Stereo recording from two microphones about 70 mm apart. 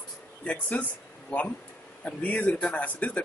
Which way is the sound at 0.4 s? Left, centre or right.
Left.